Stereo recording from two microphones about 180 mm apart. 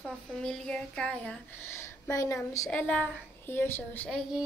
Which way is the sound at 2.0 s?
15° left (ahead or behind).